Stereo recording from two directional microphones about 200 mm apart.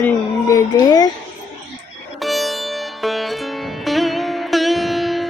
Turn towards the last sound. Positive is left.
turn(degrees=0)  # may be behind; listen again after turning